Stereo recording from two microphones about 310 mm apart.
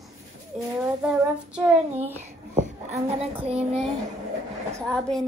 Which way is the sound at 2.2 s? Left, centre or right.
Right.